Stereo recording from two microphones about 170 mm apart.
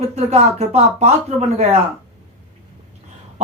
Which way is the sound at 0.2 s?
40° right (ahead or behind).